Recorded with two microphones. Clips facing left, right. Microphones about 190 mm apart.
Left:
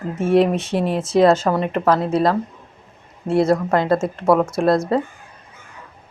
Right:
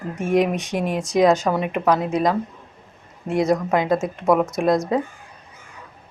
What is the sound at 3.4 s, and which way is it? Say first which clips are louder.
Speech: left 2 dB; 15° right (ahead or behind).